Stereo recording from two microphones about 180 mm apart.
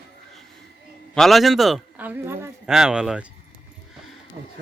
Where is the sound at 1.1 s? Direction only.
Centre (ahead or behind).